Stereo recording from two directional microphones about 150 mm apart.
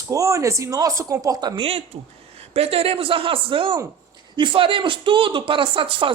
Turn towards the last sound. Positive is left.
turn(degrees=-35)  # may be behind; listen again after turning